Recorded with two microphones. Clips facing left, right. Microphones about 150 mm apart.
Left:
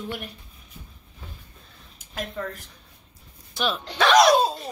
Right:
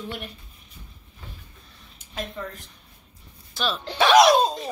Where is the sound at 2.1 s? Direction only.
Centre (ahead or behind).